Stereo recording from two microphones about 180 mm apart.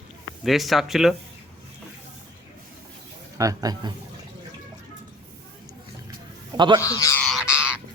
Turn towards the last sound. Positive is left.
turn(degrees=-5)  # may be behind; listen again after turning